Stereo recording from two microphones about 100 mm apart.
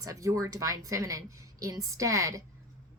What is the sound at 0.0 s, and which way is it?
A woman's voice, 35° right (ahead or behind).